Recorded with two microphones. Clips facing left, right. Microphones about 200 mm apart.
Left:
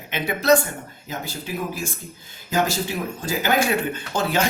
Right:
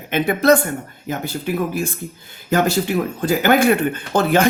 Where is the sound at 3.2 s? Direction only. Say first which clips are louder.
Right 6 dB; 60° right (ahead or behind).